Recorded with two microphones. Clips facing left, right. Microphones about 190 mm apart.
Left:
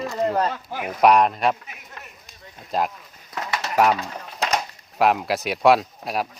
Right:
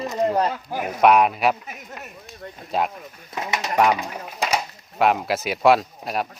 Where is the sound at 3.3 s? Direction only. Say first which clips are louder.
Right 1 dB; 20° right (ahead or behind).